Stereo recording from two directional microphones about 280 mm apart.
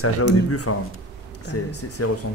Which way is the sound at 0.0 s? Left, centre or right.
Left.